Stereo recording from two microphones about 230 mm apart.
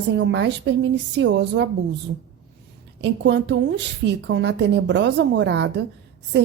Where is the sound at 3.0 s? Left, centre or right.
Right.